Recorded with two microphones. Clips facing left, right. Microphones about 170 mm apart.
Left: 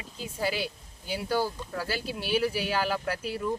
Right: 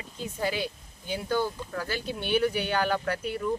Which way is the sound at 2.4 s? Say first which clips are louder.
Right 2 dB; 30° left (ahead or behind).